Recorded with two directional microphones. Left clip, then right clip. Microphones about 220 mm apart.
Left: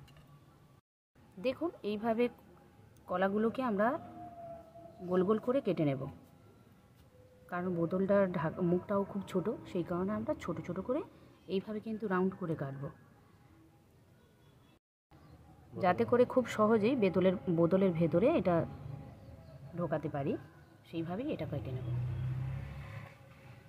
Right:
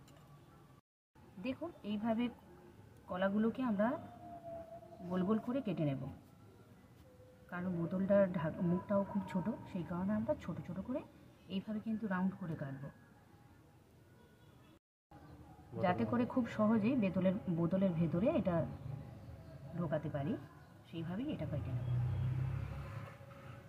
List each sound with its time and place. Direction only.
1.4 s speech: 55° left (ahead or behind)
5.1 s speech: 55° left (ahead or behind)
7.4 s speech: 55° left (ahead or behind)
15.8 s speech: 55° left (ahead or behind)
19.9 s speech: 55° left (ahead or behind)